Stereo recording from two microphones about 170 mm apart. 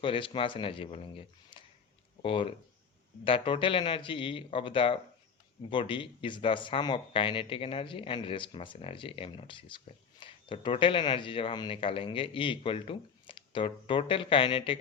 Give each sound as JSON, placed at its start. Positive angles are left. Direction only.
{"t": 0.0, "sound": "speech", "side_deg": 30}